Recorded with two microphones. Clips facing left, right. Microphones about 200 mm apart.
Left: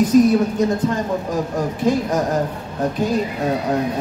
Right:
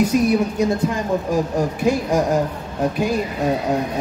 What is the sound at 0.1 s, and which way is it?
Speech, 10° right (ahead or behind).